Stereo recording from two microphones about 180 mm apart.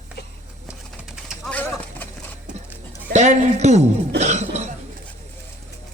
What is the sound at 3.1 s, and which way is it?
Speech, 40° right (ahead or behind).